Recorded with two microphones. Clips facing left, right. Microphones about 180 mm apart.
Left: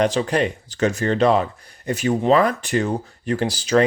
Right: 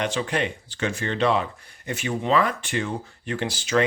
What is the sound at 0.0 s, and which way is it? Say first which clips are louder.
Speech: left 6 dB; 35° left (ahead or behind).